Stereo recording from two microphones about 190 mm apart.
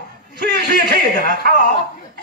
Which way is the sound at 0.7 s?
50° right (ahead or behind).